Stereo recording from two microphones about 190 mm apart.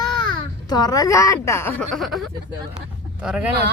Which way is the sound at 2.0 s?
Centre (ahead or behind).